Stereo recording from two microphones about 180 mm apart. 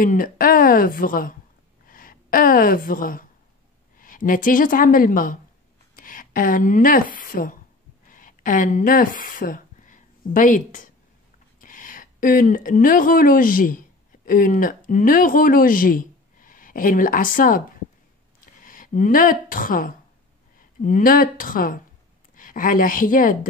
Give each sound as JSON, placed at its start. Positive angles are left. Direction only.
{"t": 0.0, "sound": "a woman's voice", "side_deg": 50}